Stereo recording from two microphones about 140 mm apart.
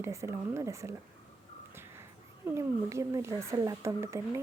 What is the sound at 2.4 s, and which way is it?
Speech, 20° right (ahead or behind).